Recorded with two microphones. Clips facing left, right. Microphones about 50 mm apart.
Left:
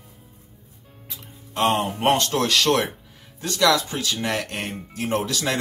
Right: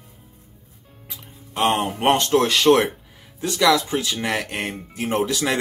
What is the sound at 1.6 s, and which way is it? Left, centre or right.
Speech, centre.